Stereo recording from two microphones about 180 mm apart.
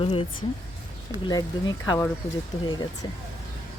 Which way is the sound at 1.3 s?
20° left (ahead or behind).